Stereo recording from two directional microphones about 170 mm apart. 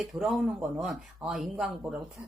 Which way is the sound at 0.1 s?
Centre (ahead or behind).